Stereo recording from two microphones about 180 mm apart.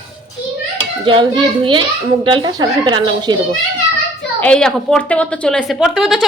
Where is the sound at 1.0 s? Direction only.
25° right (ahead or behind).